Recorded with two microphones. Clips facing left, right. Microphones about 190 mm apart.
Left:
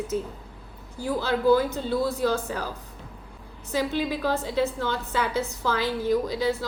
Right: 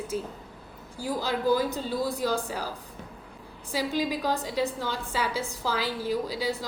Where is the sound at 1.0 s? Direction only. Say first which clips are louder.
Left 4 dB; 10° right (ahead or behind).